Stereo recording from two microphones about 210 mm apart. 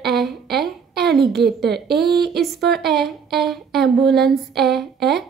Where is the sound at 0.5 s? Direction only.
50° right (ahead or behind).